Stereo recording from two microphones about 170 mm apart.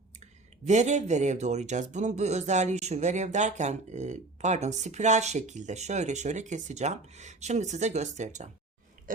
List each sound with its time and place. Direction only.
0.2 s speech: 40° right (ahead or behind)